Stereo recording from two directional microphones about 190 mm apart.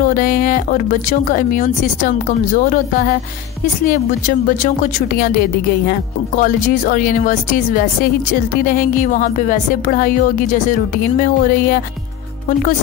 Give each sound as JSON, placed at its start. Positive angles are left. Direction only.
{"t": 0.0, "sound": "speech", "side_deg": 45}
{"t": 5.9, "sound": "speech", "side_deg": 45}